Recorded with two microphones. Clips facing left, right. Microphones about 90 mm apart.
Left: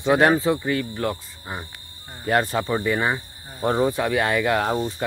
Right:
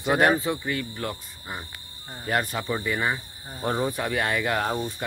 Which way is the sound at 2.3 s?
30° left (ahead or behind).